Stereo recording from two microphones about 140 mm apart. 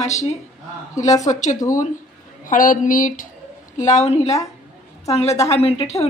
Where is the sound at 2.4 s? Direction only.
75° left (ahead or behind).